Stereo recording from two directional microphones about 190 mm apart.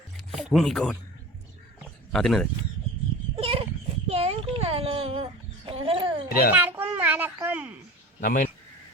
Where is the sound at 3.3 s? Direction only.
30° right (ahead or behind).